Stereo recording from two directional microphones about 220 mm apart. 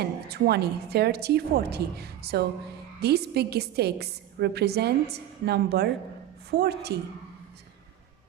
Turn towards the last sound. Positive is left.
turn(degrees=-45)  # may be behind; listen again after turning